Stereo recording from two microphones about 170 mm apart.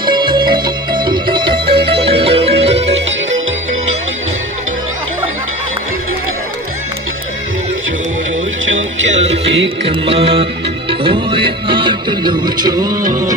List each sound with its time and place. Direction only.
0.0 s music: 25° right (ahead or behind)
8.6 s music: 90° right
9.1 s music: 35° right (ahead or behind)